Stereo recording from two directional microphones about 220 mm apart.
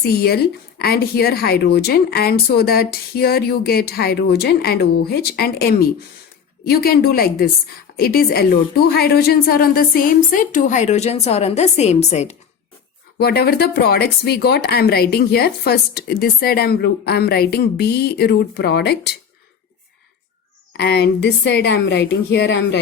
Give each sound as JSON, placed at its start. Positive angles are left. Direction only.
{"t": 0.0, "sound": "a woman's voice", "side_deg": 45}
{"t": 13.1, "sound": "speech", "side_deg": 45}
{"t": 20.7, "sound": "speech", "side_deg": 45}